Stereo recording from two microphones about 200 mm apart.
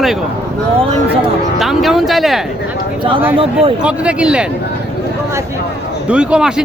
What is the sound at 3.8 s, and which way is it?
Speech, 5° right (ahead or behind).